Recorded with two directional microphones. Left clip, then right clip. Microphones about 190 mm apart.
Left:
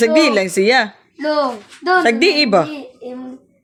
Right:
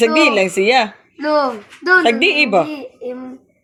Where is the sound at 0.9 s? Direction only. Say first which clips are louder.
Right 1 dB; 10° left (ahead or behind).